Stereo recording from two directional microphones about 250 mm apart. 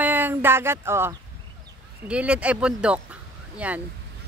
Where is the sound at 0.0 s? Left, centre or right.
Centre.